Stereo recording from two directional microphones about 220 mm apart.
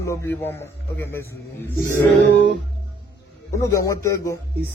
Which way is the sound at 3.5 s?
15° left (ahead or behind).